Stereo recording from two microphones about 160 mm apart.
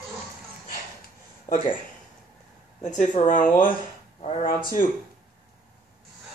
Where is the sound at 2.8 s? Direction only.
50° left (ahead or behind).